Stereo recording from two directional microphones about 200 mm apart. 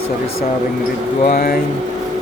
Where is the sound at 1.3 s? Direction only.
50° left (ahead or behind).